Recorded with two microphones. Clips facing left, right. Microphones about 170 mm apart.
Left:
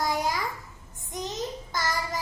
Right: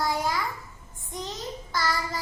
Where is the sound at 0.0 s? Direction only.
15° left (ahead or behind).